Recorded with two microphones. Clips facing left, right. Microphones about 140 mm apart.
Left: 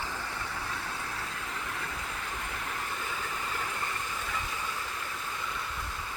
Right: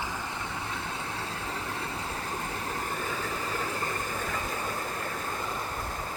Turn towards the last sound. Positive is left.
turn(degrees=-40)  # may be behind; listen again after turning